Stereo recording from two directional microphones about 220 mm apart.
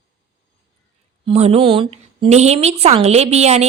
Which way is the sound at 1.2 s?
25° right (ahead or behind).